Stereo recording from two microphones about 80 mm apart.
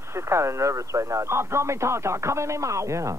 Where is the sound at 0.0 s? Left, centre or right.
Right.